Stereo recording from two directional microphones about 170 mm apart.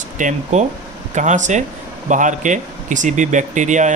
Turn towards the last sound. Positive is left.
turn(degrees=-45)  # may be behind; listen again after turning